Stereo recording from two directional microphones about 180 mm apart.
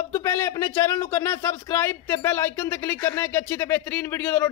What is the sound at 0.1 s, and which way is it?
A man's voice, 15° left (ahead or behind).